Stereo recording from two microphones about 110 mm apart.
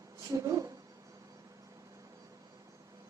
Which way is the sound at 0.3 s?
30° right (ahead or behind).